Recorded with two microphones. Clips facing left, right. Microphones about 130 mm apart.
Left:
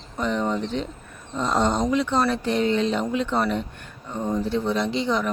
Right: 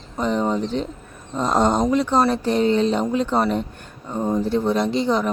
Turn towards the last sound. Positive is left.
turn(degrees=-40)  # may be behind; listen again after turning